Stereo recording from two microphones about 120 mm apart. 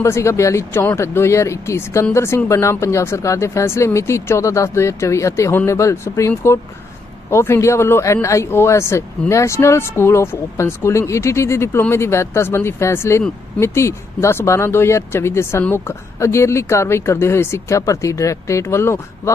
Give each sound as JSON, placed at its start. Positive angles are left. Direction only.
{"t": 0.0, "sound": "speech", "side_deg": 25}